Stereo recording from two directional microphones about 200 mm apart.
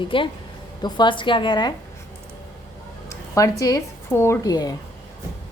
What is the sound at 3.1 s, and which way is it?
Speech, 15° left (ahead or behind).